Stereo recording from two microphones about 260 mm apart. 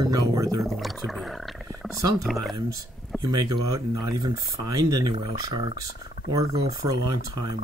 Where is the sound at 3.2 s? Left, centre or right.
Centre.